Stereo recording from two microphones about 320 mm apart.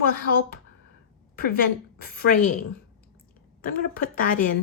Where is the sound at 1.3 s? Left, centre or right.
Left.